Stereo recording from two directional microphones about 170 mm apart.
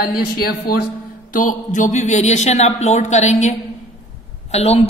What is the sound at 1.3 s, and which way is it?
A man's voice, 50° left (ahead or behind).